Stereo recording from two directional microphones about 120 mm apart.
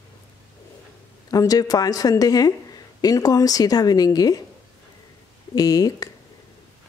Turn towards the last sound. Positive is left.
turn(degrees=30)  # may be behind; listen again after turning